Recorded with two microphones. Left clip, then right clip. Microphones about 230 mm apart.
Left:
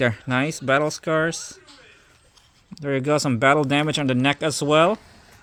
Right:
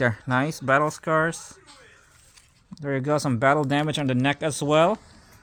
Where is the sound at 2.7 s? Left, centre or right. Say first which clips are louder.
Left 3 dB; centre.